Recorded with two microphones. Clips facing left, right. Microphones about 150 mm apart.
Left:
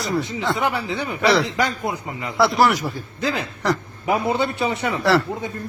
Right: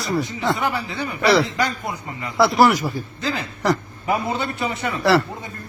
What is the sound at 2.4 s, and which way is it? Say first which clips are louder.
Speech: right 2 dB; centre (ahead or behind).